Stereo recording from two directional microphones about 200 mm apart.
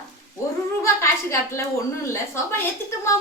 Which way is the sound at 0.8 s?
15° left (ahead or behind).